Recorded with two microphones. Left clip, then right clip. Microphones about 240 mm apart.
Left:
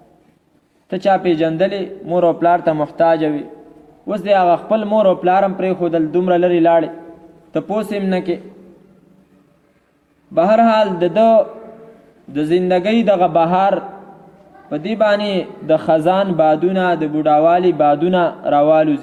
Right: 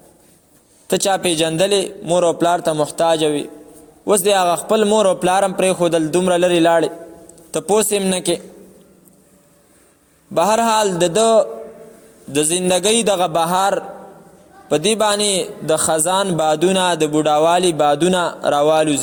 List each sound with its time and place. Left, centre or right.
0.9 s a man's voice: right
10.3 s a man's voice: right